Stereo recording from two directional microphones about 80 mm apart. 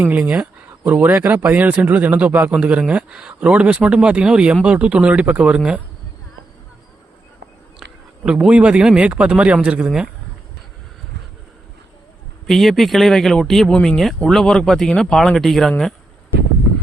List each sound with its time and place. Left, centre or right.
0.0 s a man's voice: right
8.2 s a man's voice: centre
12.5 s speech: centre